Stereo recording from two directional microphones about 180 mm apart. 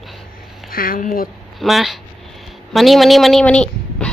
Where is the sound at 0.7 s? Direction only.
55° left (ahead or behind).